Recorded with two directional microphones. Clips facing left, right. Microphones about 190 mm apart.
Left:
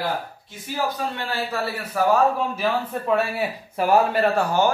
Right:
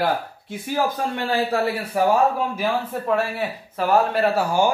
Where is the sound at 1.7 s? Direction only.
10° right (ahead or behind).